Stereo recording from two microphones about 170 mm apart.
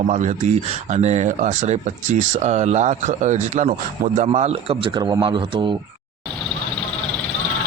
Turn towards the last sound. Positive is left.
turn(degrees=-30)  # may be behind; listen again after turning